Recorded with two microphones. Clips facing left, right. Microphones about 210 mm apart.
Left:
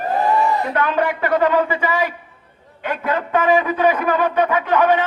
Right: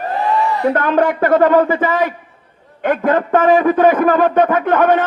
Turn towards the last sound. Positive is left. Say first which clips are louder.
# right 3 dB
turn(degrees=-50)  # may be behind; listen again after turning